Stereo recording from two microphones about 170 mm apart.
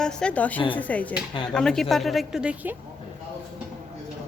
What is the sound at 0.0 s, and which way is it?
Speech, 5° left (ahead or behind).